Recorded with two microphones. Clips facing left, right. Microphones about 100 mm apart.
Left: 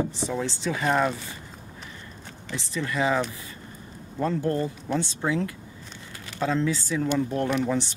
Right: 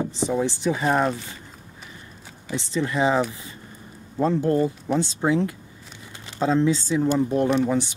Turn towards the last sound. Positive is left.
turn(degrees=-15)  # may be behind; listen again after turning